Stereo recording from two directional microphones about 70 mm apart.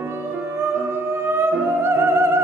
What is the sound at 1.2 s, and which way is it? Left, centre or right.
Music, right.